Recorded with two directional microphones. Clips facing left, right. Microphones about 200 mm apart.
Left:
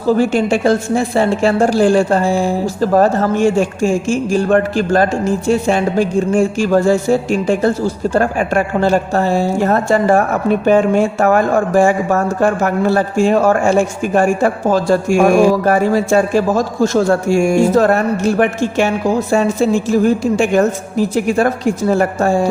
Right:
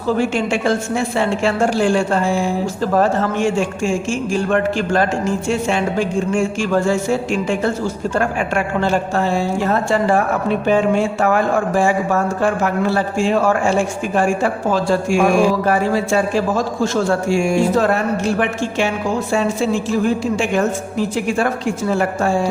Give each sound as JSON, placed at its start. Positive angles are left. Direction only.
{"t": 0.2, "sound": "a woman's voice", "side_deg": 40}